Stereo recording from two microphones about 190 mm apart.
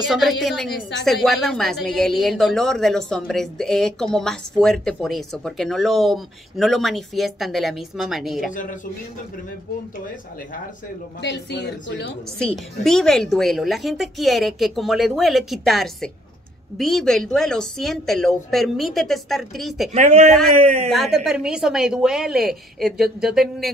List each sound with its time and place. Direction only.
0.0 s a woman's voice: centre (ahead or behind)
11.1 s speech: 65° left (ahead or behind)
12.4 s a woman's voice: 5° left (ahead or behind)
19.9 s a man's voice: 40° right (ahead or behind)
20.9 s a woman's voice: centre (ahead or behind)